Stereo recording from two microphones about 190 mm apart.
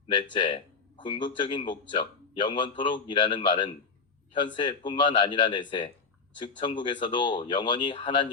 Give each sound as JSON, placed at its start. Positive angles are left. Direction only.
{"t": 0.3, "sound": "speech", "side_deg": 25}